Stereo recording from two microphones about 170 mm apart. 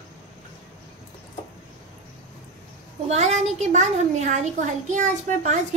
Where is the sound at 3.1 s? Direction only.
45° right (ahead or behind).